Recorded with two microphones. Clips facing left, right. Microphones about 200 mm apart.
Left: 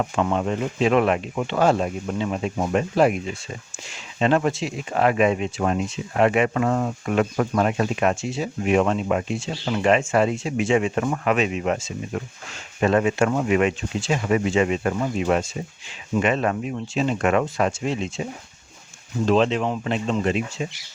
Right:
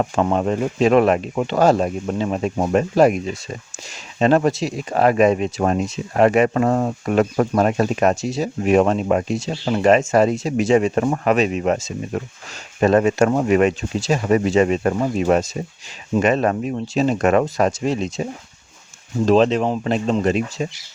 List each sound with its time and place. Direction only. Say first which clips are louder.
0.0 s speech: right 4 dB; 40° right (ahead or behind)